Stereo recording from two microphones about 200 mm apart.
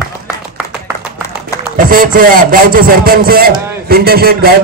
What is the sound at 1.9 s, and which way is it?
A man's voice, 45° right (ahead or behind).